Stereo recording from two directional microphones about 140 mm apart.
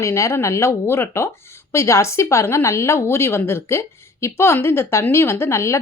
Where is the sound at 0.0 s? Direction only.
20° left (ahead or behind).